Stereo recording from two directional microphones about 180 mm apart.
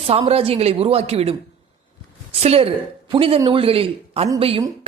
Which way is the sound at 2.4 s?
35° right (ahead or behind).